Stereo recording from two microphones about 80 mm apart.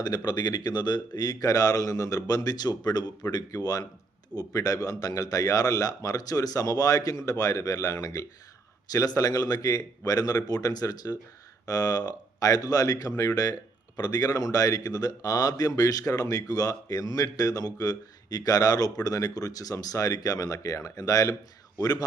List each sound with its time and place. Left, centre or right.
0.3 s a man's voice: left